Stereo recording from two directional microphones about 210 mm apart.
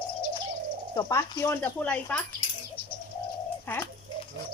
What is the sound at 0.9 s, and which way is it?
Speech, 15° left (ahead or behind).